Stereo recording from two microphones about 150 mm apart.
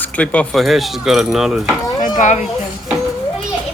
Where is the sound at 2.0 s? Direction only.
55° left (ahead or behind).